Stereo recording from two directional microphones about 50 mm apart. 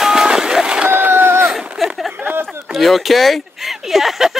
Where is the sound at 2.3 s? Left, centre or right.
Right.